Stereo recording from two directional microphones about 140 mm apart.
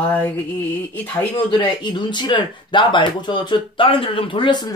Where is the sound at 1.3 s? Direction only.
35° left (ahead or behind).